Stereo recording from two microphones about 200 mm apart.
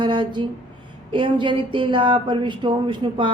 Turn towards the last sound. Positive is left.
turn(degrees=-25)  # may be behind; listen again after turning